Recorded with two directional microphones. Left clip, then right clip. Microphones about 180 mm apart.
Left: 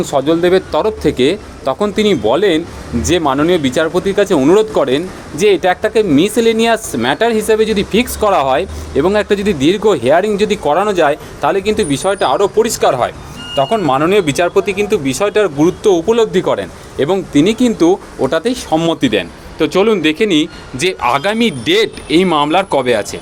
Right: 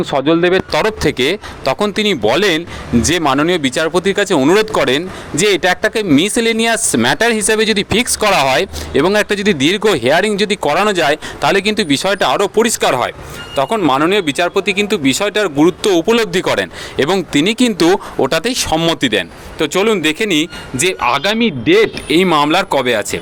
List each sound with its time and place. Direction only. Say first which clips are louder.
0.0 s speech: even; 15° right (ahead or behind); by 21.8 s 5° left (ahead or behind)
22.1 s speech: left 1 dB; 10° right (ahead or behind)